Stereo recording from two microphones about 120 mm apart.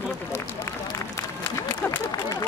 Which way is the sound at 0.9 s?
20° left (ahead or behind).